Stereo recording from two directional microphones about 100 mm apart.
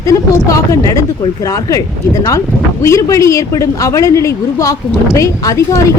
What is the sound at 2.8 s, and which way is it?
A woman's voice, 30° left (ahead or behind).